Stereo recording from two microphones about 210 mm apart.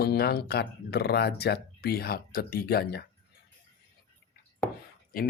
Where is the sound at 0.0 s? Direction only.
50° left (ahead or behind).